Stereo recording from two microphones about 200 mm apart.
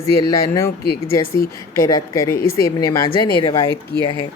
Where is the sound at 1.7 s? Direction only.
15° left (ahead or behind).